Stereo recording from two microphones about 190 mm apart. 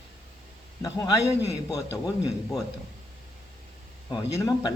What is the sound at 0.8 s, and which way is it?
Speech, 15° left (ahead or behind).